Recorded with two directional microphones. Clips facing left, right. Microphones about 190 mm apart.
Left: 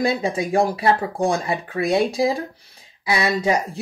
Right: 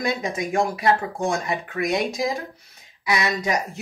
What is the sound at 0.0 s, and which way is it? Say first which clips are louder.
Speech: left 4 dB; 30° left (ahead or behind).